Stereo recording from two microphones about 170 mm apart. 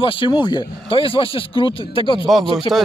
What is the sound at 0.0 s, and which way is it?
Speech, 30° left (ahead or behind).